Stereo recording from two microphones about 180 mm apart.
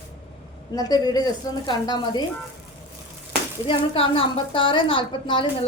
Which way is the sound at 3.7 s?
30° left (ahead or behind).